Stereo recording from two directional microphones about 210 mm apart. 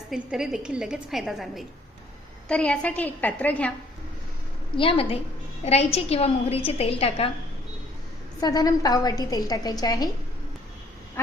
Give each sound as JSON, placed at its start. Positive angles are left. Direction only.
{"t": 0.1, "sound": "a woman's voice", "side_deg": -5}
{"t": 4.8, "sound": "a woman's voice", "side_deg": 25}
{"t": 8.4, "sound": "a woman's voice", "side_deg": 20}